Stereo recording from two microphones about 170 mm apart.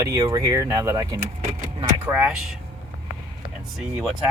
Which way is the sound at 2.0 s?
10° right (ahead or behind).